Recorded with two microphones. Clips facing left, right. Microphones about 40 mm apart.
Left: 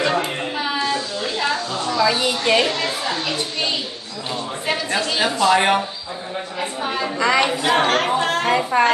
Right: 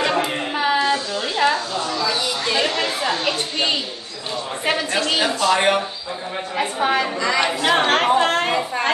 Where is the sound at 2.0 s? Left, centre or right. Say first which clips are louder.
Left 7 dB; left.